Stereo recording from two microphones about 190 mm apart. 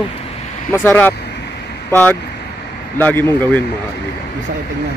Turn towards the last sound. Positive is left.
turn(degrees=10)  # may be behind; listen again after turning